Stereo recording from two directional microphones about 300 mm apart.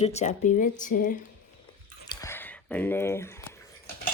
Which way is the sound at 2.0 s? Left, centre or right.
Centre.